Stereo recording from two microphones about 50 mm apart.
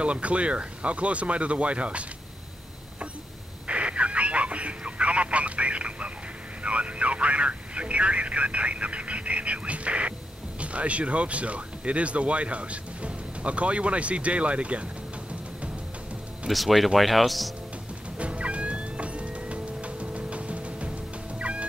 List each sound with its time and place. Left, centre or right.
0.0 s speech: right
3.6 s a sound: right
6.6 s vehicle: right
10.6 s speech: right
16.4 s speech: centre
18.1 s music: right
21.4 s fowl: right